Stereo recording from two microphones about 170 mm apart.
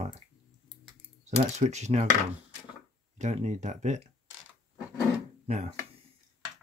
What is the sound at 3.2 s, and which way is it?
Speech, 45° right (ahead or behind).